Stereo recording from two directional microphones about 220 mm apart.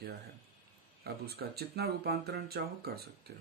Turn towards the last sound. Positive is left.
turn(degrees=-45)  # may be behind; listen again after turning